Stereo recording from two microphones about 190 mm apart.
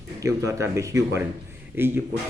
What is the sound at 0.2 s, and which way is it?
Speech, 15° right (ahead or behind).